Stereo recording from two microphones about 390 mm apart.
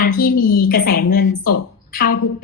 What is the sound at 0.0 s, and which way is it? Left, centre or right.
Speech, left.